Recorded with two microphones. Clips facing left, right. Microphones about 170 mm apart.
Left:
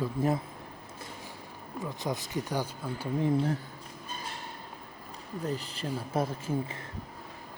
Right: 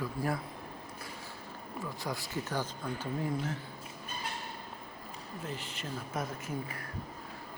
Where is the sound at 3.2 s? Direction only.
30° left (ahead or behind).